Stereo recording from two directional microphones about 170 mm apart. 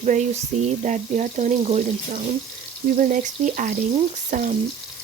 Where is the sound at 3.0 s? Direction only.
50° right (ahead or behind).